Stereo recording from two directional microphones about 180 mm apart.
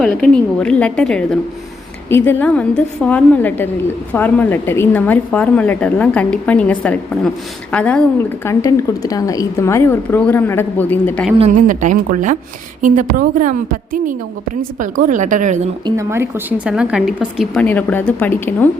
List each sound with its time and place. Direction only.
0.0 s a woman's voice: 5° left (ahead or behind)
8.4 s a woman's voice: 15° left (ahead or behind)
11.3 s a woman's voice: 40° right (ahead or behind)
16.0 s speech: 15° right (ahead or behind); by 18.7 s 10° left (ahead or behind)